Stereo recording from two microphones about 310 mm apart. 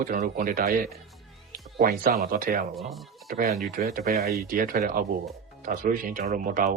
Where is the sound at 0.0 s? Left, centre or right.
Right.